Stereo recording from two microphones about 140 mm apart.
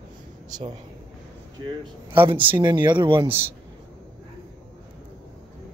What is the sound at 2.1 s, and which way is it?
Speech, 35° right (ahead or behind).